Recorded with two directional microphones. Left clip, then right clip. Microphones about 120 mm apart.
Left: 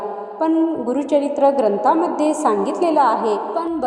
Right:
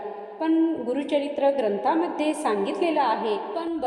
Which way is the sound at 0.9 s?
35° left (ahead or behind).